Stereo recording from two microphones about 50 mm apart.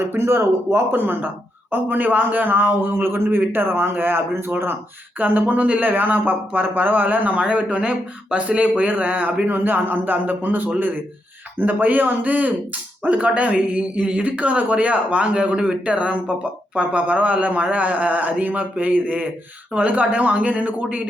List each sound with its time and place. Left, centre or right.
0.0 s a man's voice: right
7.3 s speech: right